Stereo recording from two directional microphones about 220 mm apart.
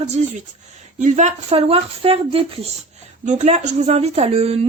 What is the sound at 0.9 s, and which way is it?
A woman's voice, 35° right (ahead or behind).